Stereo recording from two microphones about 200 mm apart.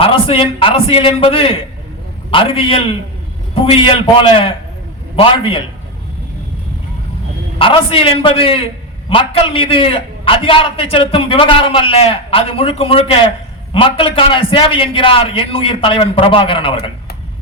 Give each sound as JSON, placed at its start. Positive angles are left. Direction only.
{"t": 0.0, "sound": "a man's voice", "side_deg": 25}
{"t": 7.6, "sound": "a man's voice", "side_deg": 25}